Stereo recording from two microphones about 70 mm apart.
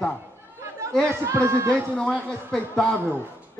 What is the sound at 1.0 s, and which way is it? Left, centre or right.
Speech, right.